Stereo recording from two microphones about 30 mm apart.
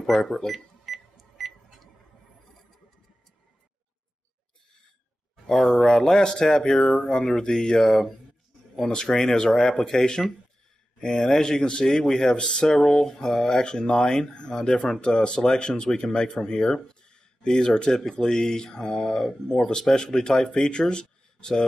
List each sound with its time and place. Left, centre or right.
0.1 s speech: centre
0.5 s cash register: centre
5.5 s speech: centre
6.1 s speech: left
9.1 s speech: left
10.2 s speech: centre
11.0 s speech: left
13.6 s speech: left